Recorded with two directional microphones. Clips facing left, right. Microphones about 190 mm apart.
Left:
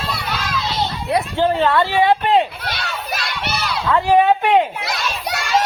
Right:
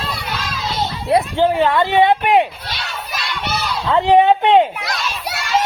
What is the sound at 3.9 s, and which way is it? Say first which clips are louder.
Speech: right 2 dB; 20° right (ahead or behind).